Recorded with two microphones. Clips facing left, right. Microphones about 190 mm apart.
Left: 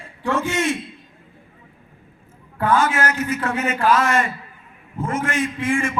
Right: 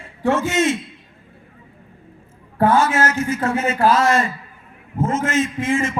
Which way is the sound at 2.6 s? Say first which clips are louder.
Right 3 dB; 25° right (ahead or behind).